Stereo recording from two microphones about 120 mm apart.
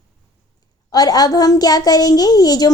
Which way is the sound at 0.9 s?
30° left (ahead or behind).